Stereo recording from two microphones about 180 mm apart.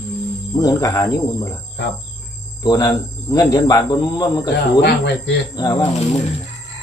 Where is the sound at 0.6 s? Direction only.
20° left (ahead or behind).